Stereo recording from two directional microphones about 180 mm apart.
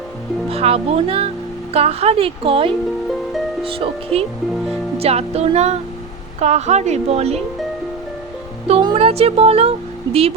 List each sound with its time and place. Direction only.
0.5 s speech: 35° right (ahead or behind)
8.6 s speech: 30° right (ahead or behind)